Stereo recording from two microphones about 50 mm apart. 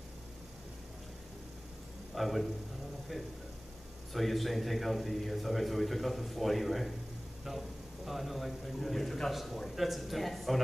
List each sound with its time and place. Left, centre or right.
2.1 s a man's voice: centre
4.1 s a man's voice: centre